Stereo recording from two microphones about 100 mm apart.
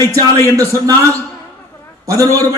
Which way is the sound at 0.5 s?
30° right (ahead or behind).